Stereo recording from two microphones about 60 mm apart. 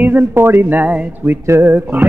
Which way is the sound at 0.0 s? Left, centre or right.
Right.